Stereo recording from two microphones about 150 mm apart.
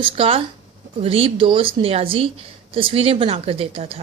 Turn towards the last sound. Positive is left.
turn(degrees=-40)  # may be behind; listen again after turning